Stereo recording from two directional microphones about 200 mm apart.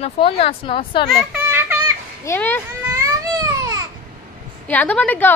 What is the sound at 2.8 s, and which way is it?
Babbling, 15° right (ahead or behind).